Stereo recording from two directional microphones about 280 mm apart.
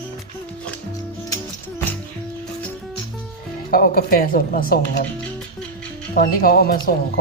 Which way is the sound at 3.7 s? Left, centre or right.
Left.